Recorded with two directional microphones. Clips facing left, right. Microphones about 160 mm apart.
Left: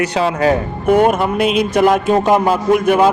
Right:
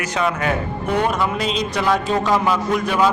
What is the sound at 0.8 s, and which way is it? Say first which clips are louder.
Speech: left 8 dB; 50° left (ahead or behind).